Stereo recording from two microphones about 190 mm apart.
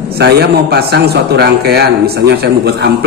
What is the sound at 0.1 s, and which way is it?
A man's voice, 55° right (ahead or behind).